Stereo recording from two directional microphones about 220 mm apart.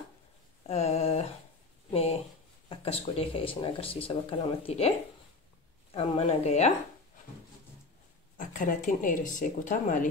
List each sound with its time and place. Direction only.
0.7 s a sound: 30° left (ahead or behind)
2.7 s speech: 25° left (ahead or behind)
5.9 s speech: 25° left (ahead or behind)
8.4 s speech: 35° left (ahead or behind)